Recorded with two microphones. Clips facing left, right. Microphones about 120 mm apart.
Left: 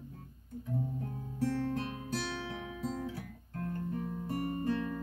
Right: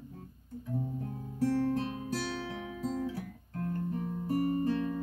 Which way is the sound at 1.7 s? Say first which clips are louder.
Right 3 dB; 35° right (ahead or behind).